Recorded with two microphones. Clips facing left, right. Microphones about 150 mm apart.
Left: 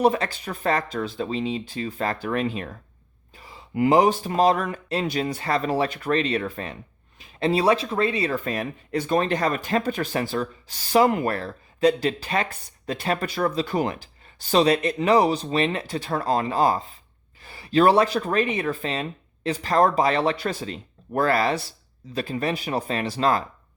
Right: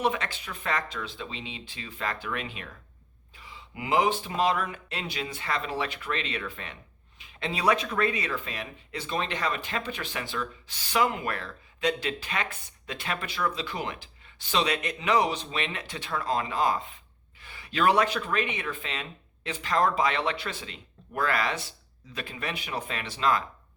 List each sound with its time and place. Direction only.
0.0 s speech: 40° left (ahead or behind)
8.4 s speech: 45° left (ahead or behind)